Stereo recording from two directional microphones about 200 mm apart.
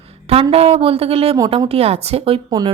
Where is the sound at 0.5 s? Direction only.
30° right (ahead or behind).